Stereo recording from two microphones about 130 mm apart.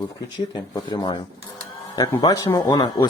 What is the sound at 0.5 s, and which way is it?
Speech, 30° left (ahead or behind).